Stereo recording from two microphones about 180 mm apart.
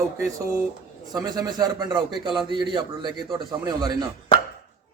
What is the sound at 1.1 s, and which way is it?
A man's voice, 20° right (ahead or behind).